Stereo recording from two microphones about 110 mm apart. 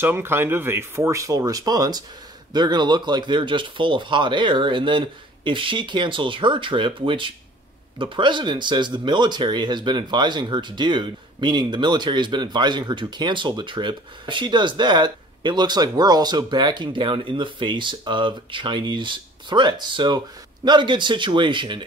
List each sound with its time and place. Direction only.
0.0 s speech: 20° right (ahead or behind); by 21.8 s 45° right (ahead or behind)